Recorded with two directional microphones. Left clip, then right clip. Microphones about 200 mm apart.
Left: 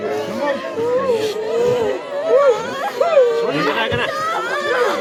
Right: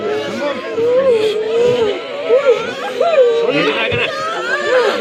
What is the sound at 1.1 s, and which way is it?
Vehicle, 10° left (ahead or behind).